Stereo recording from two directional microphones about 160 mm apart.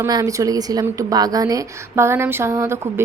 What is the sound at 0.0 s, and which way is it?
A woman's voice, 20° right (ahead or behind).